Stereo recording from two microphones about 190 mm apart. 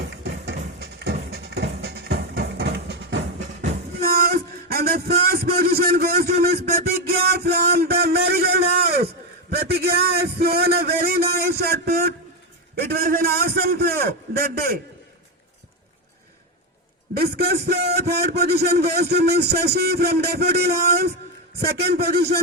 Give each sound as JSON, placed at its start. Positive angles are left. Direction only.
{"t": 0.1, "sound": "music", "side_deg": -60}
{"t": 4.0, "sound": "a sound", "side_deg": -55}
{"t": 9.6, "sound": "a man's voice", "side_deg": -55}
{"t": 17.2, "sound": "a man's voice", "side_deg": -55}